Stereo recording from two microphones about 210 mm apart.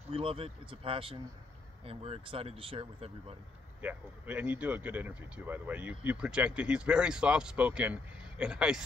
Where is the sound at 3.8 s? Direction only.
5° right (ahead or behind).